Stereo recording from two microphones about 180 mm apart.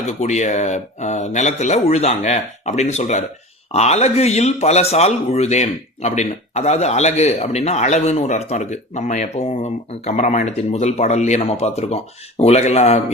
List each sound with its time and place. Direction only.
0.0 s speech: 40° left (ahead or behind)